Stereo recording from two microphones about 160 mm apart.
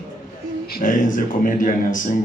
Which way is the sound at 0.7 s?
55° left (ahead or behind).